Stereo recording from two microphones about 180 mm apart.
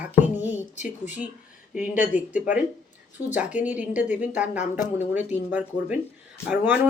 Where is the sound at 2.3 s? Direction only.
10° right (ahead or behind).